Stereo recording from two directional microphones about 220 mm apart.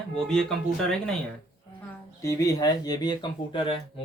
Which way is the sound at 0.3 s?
Centre (ahead or behind).